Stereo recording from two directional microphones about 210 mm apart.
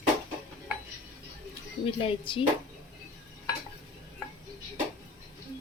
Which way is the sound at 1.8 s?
25° left (ahead or behind).